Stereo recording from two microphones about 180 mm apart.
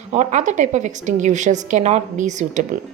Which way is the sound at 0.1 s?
40° right (ahead or behind).